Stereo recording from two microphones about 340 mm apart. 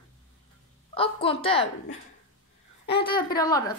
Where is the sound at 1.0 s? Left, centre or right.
Centre.